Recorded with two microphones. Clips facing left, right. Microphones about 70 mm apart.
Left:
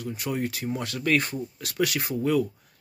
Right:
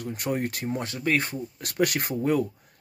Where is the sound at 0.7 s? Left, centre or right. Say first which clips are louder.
Left 1 dB; right.